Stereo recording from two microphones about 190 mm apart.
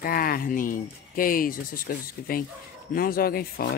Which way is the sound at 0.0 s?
50° left (ahead or behind).